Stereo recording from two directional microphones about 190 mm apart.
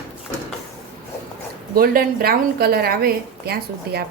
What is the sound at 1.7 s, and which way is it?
A woman's voice, 50° right (ahead or behind).